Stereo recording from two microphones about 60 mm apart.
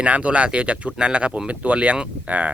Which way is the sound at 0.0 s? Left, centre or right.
Right.